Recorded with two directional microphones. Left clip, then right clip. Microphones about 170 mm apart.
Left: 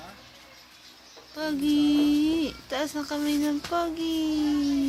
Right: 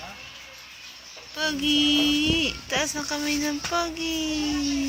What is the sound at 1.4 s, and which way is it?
Speech, 20° left (ahead or behind).